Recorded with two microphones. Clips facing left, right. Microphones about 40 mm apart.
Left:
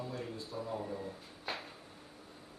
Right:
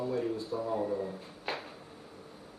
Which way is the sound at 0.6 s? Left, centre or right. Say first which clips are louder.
Right 6 dB; centre.